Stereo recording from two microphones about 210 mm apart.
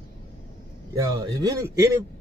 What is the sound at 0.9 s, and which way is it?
Speech, 15° right (ahead or behind).